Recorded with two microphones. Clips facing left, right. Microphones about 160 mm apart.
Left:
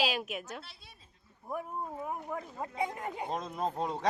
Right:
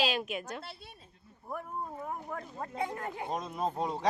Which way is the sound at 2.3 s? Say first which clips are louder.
Left 1 dB; 10° left (ahead or behind).